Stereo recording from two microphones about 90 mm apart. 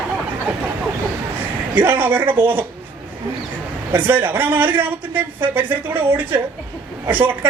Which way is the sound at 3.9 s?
20° right (ahead or behind).